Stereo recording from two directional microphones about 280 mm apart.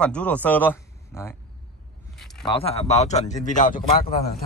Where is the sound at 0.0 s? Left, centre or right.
Centre.